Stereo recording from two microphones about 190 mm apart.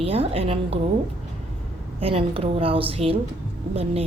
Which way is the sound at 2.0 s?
30° right (ahead or behind).